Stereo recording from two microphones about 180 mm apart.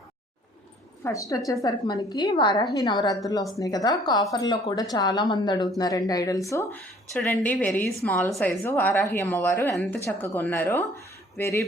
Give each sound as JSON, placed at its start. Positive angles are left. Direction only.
{"t": 1.0, "sound": "a woman's voice", "side_deg": 15}
{"t": 7.1, "sound": "a woman's voice", "side_deg": 5}